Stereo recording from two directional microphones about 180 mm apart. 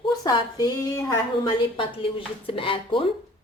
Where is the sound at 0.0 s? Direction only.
25° left (ahead or behind).